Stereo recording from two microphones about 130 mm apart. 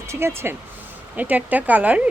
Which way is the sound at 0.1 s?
20° right (ahead or behind).